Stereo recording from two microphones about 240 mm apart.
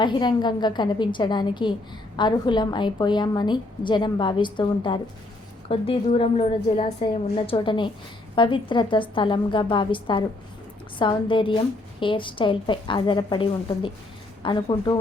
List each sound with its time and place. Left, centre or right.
0.0 s a woman's voice: centre